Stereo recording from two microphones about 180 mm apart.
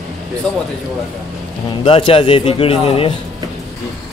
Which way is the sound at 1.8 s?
30° left (ahead or behind).